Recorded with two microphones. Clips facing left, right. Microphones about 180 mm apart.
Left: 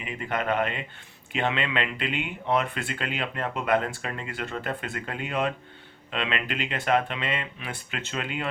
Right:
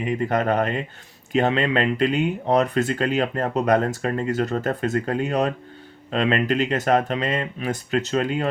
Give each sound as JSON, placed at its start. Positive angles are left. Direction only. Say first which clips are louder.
{"t": 0.0, "sound": "speech", "louder": "right 8 dB", "side_deg": -40}